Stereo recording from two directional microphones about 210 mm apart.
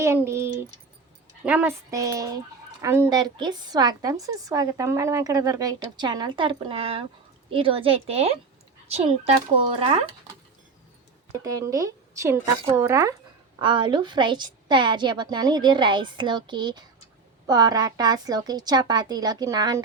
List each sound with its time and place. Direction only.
0.0 s a woman's voice: 10° right (ahead or behind); by 10.1 s 30° right (ahead or behind)
11.4 s a woman's voice: 15° right (ahead or behind)